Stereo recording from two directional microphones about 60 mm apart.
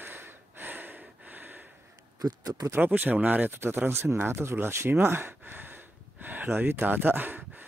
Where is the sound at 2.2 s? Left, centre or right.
Right.